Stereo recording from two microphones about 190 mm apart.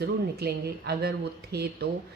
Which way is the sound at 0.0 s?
55° right (ahead or behind).